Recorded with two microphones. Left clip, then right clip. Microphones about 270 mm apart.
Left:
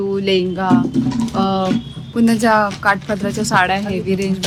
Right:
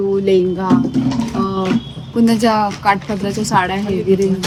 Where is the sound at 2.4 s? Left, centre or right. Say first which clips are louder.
Left 1 dB; centre.